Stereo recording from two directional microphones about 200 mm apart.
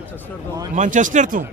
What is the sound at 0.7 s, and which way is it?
Speech, 40° right (ahead or behind).